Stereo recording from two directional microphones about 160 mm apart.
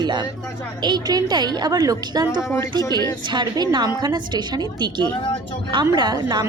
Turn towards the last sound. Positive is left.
turn(degrees=-25)  # may be behind; listen again after turning